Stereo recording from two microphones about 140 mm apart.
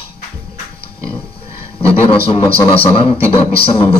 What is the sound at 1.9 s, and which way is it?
A man's voice, 40° left (ahead or behind).